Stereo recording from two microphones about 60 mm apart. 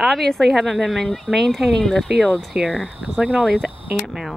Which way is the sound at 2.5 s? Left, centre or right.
Centre.